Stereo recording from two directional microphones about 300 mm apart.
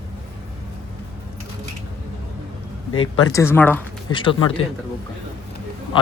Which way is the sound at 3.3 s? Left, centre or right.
Centre.